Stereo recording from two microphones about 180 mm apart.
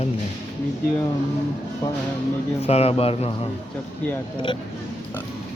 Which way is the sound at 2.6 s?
35° left (ahead or behind).